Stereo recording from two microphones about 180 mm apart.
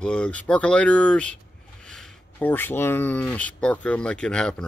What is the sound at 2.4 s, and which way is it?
Speech, 10° left (ahead or behind).